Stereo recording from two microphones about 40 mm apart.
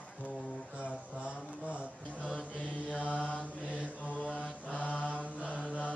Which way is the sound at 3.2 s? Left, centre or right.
Left.